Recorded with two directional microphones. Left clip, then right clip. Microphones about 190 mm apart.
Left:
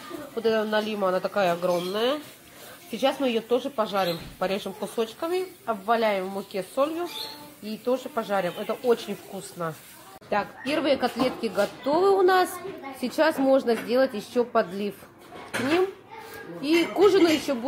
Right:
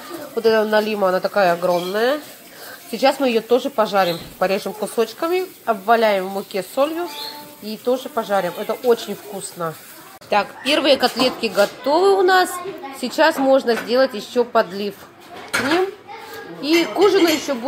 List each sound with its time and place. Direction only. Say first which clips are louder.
0.4 s a woman's voice: right 8 dB; 15° right (ahead or behind); by 15.0 s 5° left (ahead or behind)
16.6 s a woman's voice: right 5 dB; 5° left (ahead or behind)